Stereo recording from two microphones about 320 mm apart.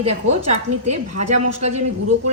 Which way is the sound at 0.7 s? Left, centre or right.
Right.